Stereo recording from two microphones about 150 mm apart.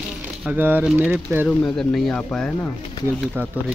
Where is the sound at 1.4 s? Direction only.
5° left (ahead or behind).